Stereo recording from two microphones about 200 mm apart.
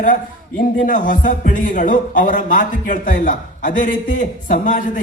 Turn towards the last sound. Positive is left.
turn(degrees=40)  # may be behind; listen again after turning